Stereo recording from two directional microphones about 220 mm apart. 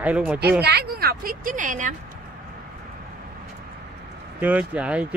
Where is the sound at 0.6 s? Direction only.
45° right (ahead or behind).